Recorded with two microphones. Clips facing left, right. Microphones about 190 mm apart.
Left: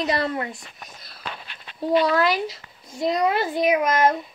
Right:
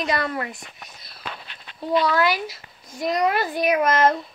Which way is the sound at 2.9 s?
25° left (ahead or behind).